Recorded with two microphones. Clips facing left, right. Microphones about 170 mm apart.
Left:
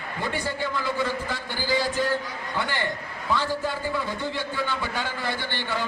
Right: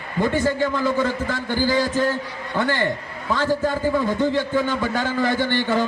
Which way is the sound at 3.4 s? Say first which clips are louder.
Right 7 dB; 45° right (ahead or behind).